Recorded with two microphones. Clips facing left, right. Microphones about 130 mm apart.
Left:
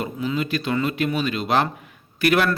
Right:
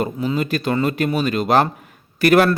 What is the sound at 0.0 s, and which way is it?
A man's voice, 40° right (ahead or behind).